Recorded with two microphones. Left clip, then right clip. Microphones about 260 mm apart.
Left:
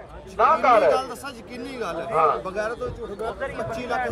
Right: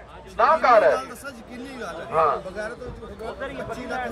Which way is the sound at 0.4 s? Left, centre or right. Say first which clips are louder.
Right 1 dB; centre.